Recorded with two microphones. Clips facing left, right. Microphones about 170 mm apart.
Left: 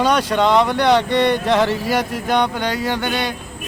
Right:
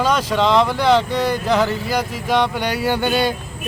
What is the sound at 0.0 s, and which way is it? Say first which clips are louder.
Speech: left 1 dB; centre (ahead or behind).